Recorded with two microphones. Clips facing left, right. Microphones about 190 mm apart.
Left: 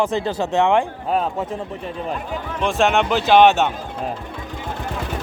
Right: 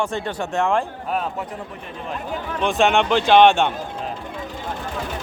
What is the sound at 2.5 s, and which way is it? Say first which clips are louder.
Speech: even; centre (ahead or behind).